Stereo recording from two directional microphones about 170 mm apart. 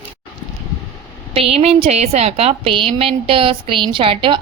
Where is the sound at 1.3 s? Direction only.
35° right (ahead or behind).